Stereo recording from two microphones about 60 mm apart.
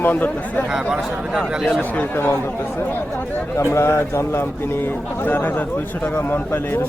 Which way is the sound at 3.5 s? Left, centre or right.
Left.